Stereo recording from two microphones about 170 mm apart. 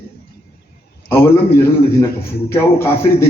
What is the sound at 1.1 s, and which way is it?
Speech, 15° left (ahead or behind).